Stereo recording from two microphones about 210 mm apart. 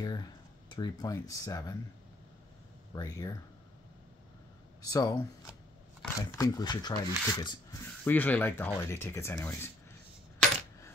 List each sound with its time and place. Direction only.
0.0 s speech: 20° left (ahead or behind)
2.9 s speech: 15° left (ahead or behind)
4.9 s speech: 15° left (ahead or behind)
6.3 s speech: 15° left (ahead or behind)
8.0 s speech: 10° left (ahead or behind)